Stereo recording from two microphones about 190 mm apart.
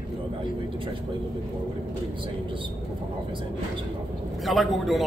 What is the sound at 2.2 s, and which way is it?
Speech, 25° right (ahead or behind).